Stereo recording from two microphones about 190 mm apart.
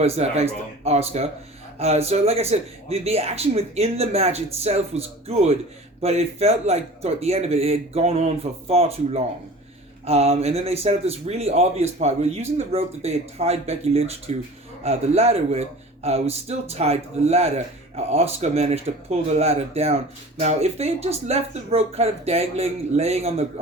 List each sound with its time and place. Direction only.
0.0 s speech: 35° right (ahead or behind)